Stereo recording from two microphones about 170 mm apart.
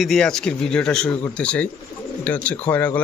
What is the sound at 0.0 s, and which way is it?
A man's voice, centre (ahead or behind).